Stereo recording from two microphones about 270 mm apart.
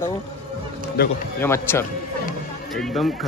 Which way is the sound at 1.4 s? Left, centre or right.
Centre.